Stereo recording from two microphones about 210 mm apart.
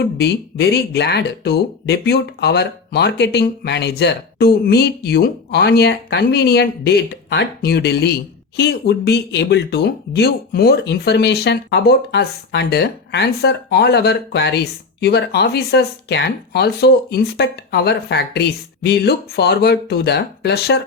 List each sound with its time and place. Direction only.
0.0 s speech: 50° left (ahead or behind)